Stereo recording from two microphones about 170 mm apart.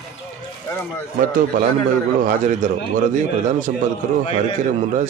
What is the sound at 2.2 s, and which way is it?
Speech, 45° right (ahead or behind).